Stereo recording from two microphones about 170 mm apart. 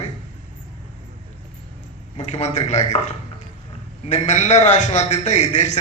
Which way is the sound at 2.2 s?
40° left (ahead or behind).